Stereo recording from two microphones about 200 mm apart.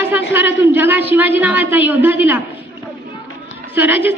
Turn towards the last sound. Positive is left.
turn(degrees=-10)  # may be behind; listen again after turning